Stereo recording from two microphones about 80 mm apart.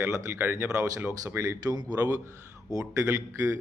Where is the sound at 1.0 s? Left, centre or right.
Right.